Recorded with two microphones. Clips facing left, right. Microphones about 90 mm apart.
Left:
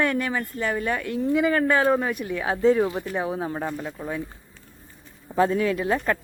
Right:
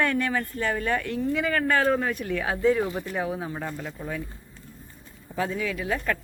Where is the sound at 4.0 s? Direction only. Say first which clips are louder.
Left 3 dB; 25° left (ahead or behind).